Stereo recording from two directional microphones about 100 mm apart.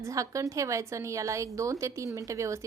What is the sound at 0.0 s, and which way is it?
A woman's voice, 30° right (ahead or behind).